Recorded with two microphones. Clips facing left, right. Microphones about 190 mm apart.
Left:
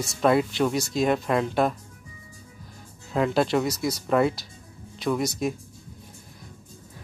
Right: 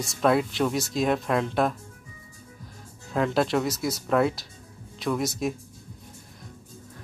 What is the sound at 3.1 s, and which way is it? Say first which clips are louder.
Speech: left 1 dB; centre (ahead or behind).